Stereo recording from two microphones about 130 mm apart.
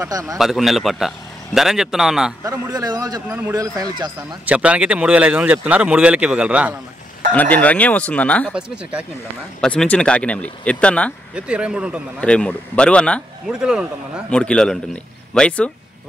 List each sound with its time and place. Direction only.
0.0 s a man's voice: 25° right (ahead or behind)
0.4 s a man's voice: centre (ahead or behind)
2.4 s a man's voice: 25° right (ahead or behind)
3.3 s speech: 15° right (ahead or behind)
3.5 s speech: 30° right (ahead or behind)
4.5 s speech: 10° right (ahead or behind)
7.3 s speech: 10° left (ahead or behind)
8.5 s speech: 5° right (ahead or behind)
9.6 s speech: 10° left (ahead or behind)
11.3 s speech: 10° right (ahead or behind)
12.2 s speech: 10° left (ahead or behind)
13.5 s a man's voice: 5° right (ahead or behind)
14.3 s speech: 5° left (ahead or behind)